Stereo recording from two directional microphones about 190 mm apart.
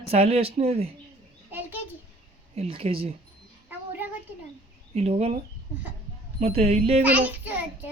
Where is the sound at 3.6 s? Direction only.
10° right (ahead or behind).